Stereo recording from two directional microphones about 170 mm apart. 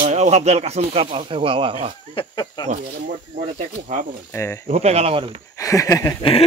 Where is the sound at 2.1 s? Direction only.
25° left (ahead or behind).